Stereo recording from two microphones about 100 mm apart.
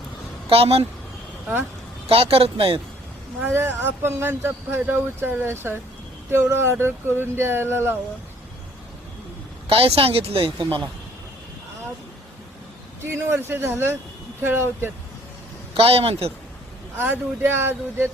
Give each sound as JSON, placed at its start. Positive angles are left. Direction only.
{"t": 0.5, "sound": "speech", "side_deg": -80}
{"t": 2.0, "sound": "speech", "side_deg": -75}
{"t": 3.4, "sound": "speech", "side_deg": -25}
{"t": 9.6, "sound": "speech", "side_deg": -70}
{"t": 13.0, "sound": "speech", "side_deg": -25}
{"t": 15.7, "sound": "speech", "side_deg": -70}
{"t": 17.0, "sound": "speech", "side_deg": -20}